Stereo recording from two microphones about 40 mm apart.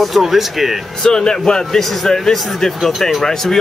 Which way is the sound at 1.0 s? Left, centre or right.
Centre.